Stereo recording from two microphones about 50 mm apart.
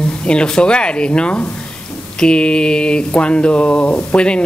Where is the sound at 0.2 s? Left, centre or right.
Centre.